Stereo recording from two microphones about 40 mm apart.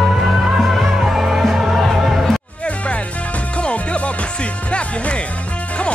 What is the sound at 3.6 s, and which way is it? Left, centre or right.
Music, left.